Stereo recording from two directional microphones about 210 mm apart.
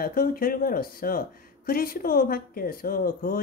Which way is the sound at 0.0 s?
45° left (ahead or behind).